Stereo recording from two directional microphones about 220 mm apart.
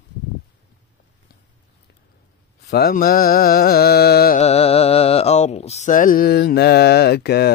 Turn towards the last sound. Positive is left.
turn(degrees=45)  # may be behind; listen again after turning